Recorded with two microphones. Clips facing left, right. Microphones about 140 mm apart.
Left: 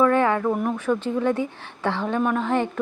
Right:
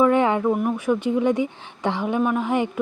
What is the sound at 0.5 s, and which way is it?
Speech, 5° right (ahead or behind).